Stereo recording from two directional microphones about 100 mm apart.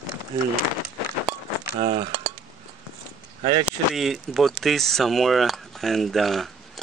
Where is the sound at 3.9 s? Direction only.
Centre (ahead or behind).